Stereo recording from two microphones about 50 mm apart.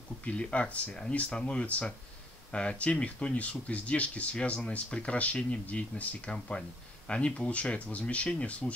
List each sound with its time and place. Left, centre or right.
0.2 s speech: left